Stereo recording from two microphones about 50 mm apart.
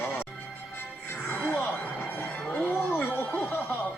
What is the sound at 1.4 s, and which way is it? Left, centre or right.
Music, left.